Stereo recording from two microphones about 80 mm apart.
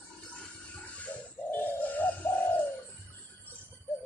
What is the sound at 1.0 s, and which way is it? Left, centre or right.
Bird, left.